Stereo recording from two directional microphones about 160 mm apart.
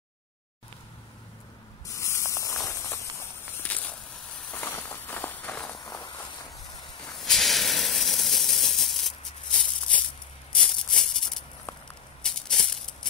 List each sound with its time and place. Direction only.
2.0 s spray: 20° left (ahead or behind)
2.6 s a sound: 20° left (ahead or behind)
3.6 s walk: 10° left (ahead or behind)
7.2 s hiss: centre (ahead or behind)
10.5 s maraca: 5° left (ahead or behind)
12.2 s a sound: 5° left (ahead or behind)